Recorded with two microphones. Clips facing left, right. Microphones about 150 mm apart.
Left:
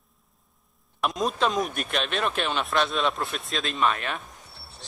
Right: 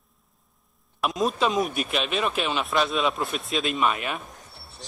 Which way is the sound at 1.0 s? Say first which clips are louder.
Right 1 dB; centre (ahead or behind).